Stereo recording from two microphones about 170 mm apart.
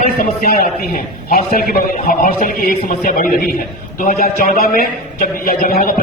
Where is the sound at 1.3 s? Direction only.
60° left (ahead or behind).